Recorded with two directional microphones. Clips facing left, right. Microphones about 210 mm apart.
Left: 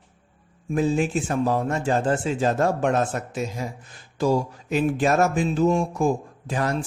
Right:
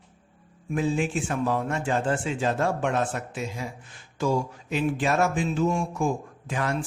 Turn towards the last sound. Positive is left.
turn(degrees=35)  # may be behind; listen again after turning